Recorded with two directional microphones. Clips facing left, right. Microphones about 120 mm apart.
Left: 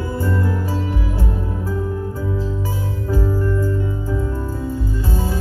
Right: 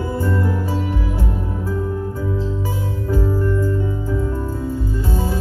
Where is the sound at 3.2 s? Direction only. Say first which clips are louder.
Right 1 dB; 25° right (ahead or behind).